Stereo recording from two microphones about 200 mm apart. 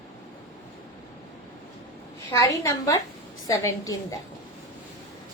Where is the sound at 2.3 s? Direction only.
15° left (ahead or behind).